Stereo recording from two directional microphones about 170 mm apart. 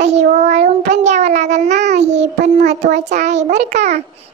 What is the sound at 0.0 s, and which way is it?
Child singing, 45° right (ahead or behind).